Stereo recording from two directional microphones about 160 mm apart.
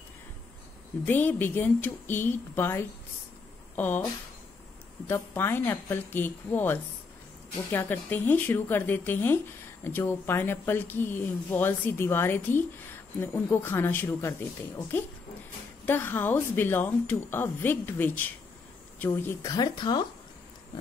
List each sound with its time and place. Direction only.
1.0 s a woman's voice: 10° left (ahead or behind); by 20.1 s 25° left (ahead or behind)